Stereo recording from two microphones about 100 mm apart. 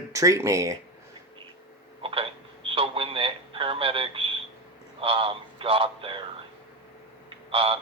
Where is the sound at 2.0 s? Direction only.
65° right (ahead or behind).